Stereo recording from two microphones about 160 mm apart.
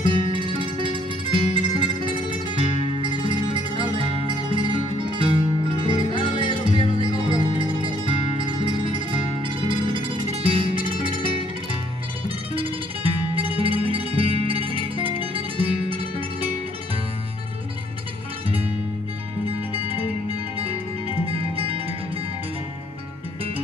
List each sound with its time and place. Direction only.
0.0 s music: 30° right (ahead or behind)
12.5 s music: 35° right (ahead or behind)
21.3 s music: 35° right (ahead or behind)